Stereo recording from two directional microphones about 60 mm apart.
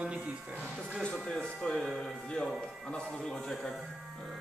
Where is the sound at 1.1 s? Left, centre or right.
Centre.